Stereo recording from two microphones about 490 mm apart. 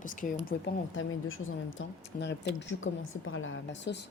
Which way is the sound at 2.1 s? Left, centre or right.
Left.